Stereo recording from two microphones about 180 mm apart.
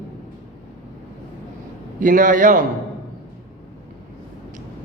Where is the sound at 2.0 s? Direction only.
45° right (ahead or behind).